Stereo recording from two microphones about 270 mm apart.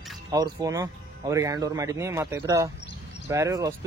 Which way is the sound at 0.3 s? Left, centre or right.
Centre.